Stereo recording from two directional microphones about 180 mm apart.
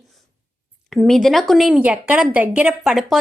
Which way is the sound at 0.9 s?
Centre (ahead or behind).